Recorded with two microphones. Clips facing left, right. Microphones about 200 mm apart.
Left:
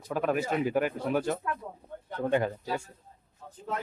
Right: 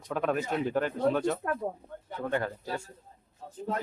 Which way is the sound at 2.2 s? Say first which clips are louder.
Left 4 dB; 20° left (ahead or behind).